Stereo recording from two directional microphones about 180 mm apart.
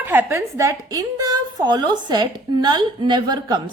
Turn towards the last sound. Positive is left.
turn(degrees=-25)  # may be behind; listen again after turning